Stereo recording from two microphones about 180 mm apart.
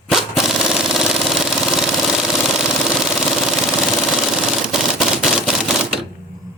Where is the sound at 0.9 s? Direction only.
5° right (ahead or behind).